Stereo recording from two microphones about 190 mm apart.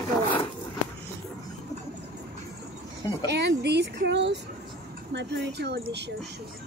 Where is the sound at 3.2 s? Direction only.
60° right (ahead or behind).